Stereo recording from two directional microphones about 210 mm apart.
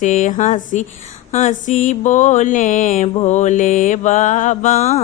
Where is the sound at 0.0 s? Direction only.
35° left (ahead or behind).